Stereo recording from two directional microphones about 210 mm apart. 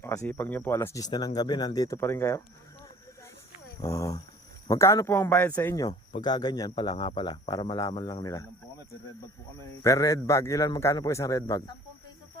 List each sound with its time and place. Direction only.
0.0 s speech: 15° left (ahead or behind)
3.8 s speech: 15° left (ahead or behind)
9.6 s speech: 15° left (ahead or behind)